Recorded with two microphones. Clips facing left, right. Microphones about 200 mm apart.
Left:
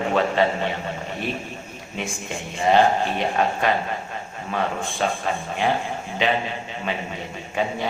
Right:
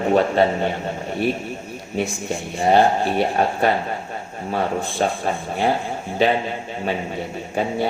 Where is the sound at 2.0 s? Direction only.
35° right (ahead or behind).